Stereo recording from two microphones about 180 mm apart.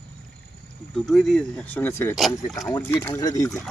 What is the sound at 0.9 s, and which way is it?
Speech, centre (ahead or behind).